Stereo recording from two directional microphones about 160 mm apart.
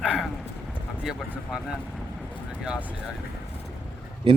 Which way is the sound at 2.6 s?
5° right (ahead or behind).